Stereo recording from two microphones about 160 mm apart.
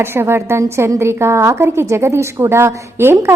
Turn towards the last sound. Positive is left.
turn(degrees=-15)  # may be behind; listen again after turning